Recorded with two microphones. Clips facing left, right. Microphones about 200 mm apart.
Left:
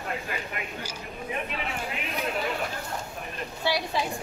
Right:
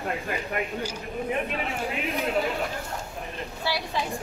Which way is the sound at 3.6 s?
15° left (ahead or behind).